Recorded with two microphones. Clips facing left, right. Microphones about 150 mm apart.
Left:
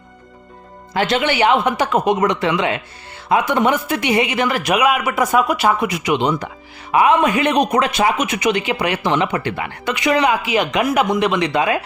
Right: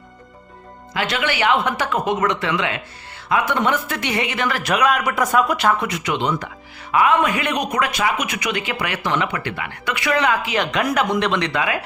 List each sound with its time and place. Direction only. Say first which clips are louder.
0.9 s a man's voice: left 5 dB; 30° left (ahead or behind); by 11.5 s 10° left (ahead or behind)
11.5 s a man's voice: left 5 dB; 25° left (ahead or behind)